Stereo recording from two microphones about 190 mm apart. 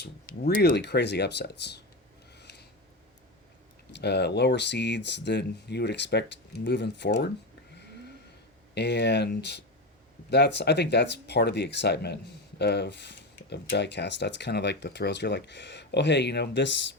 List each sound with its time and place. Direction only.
0.0 s speech: 55° left (ahead or behind)
2.3 s a sound: 60° left (ahead or behind)
3.9 s speech: 60° left (ahead or behind)
8.7 s speech: 65° left (ahead or behind)